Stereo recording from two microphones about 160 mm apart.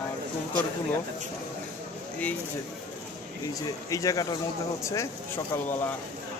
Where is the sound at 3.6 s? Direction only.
20° left (ahead or behind).